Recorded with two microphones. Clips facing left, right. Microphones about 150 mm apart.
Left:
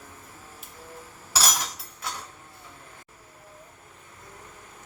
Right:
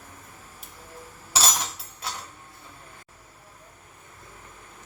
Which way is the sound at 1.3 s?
25° right (ahead or behind).